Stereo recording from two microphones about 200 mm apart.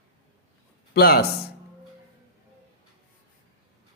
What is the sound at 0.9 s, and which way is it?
Speech, 50° left (ahead or behind).